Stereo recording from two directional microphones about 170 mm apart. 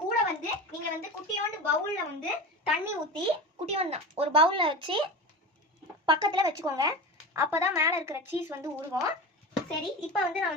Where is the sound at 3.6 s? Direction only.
40° right (ahead or behind); by 9.0 s 15° right (ahead or behind).